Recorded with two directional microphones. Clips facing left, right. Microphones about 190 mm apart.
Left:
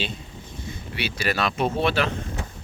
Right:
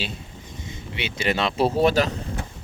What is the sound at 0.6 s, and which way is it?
Speech, 20° right (ahead or behind).